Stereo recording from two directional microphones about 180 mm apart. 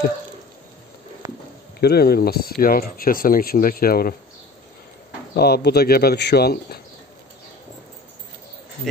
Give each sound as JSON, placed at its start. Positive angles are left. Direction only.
{"t": 1.2, "sound": "a sound", "side_deg": -15}
{"t": 1.8, "sound": "speech", "side_deg": 60}
{"t": 5.3, "sound": "speech", "side_deg": 60}